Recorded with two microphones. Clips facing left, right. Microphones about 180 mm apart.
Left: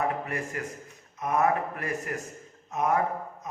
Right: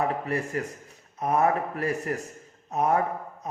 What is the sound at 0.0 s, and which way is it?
Speech, 35° right (ahead or behind).